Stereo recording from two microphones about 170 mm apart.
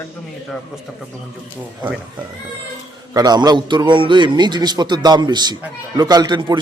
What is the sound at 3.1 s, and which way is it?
A man's voice, 25° right (ahead or behind).